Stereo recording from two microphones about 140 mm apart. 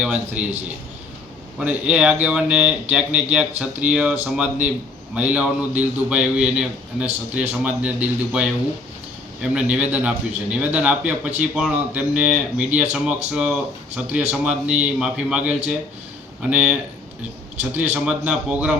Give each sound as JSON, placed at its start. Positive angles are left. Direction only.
{"t": 0.0, "sound": "speech", "side_deg": -10}
{"t": 1.5, "sound": "speech", "side_deg": -10}
{"t": 17.9, "sound": "speech", "side_deg": -10}